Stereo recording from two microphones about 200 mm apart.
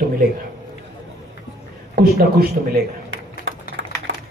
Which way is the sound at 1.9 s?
45° right (ahead or behind).